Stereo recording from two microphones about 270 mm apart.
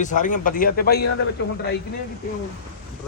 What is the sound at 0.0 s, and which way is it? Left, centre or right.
Speech, left.